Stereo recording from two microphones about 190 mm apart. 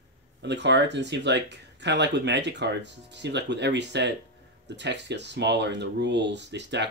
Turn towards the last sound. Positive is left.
turn(degrees=-65)  # may be behind; listen again after turning